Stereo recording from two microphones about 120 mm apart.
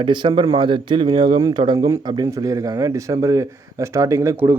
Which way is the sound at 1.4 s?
35° right (ahead or behind).